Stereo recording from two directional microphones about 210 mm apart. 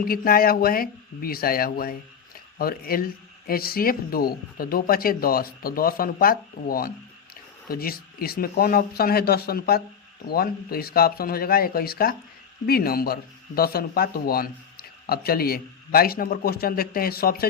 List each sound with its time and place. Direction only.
0.0 s speech: 45° left (ahead or behind)